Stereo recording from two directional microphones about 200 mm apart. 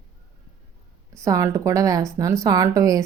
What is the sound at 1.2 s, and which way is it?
A woman's voice, 15° right (ahead or behind).